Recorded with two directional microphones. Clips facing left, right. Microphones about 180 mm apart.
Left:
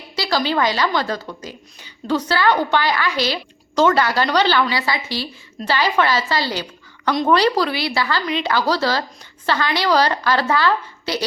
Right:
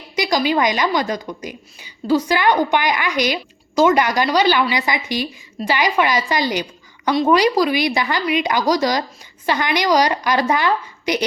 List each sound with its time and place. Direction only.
0.2 s a woman's voice: 15° right (ahead or behind)